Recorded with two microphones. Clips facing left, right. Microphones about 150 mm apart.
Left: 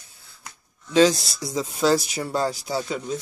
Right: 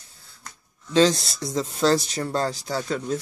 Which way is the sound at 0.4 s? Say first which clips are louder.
Even; 10° left (ahead or behind).